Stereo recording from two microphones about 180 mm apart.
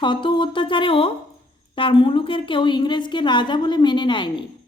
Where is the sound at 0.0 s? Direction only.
25° left (ahead or behind).